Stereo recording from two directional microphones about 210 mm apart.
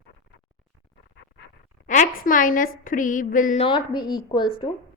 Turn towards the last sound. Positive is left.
turn(degrees=20)  # may be behind; listen again after turning